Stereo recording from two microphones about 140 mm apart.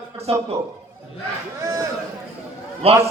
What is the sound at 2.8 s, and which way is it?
Speech, 45° right (ahead or behind).